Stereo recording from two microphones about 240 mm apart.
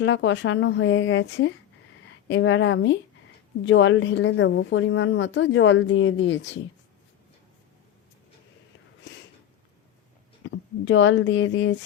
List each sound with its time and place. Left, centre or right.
0.0 s a woman's voice: left
10.4 s speech: left